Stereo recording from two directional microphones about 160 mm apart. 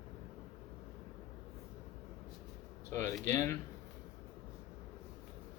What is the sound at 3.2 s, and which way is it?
Speech, 15° left (ahead or behind).